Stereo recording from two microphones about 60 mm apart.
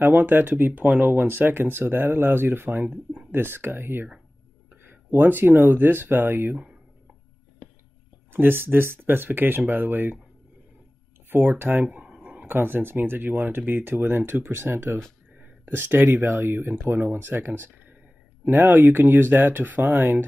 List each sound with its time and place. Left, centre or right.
0.0 s speech: right
8.3 s speech: right
11.2 s speech: right
11.8 s a sound: centre
12.4 s speech: right